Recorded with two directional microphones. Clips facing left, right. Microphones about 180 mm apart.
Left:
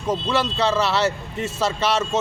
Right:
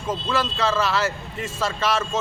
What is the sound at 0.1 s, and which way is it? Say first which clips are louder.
A man's voice: left 3 dB; 20° left (ahead or behind).